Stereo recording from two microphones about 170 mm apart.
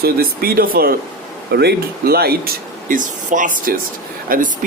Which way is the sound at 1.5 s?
75° right (ahead or behind).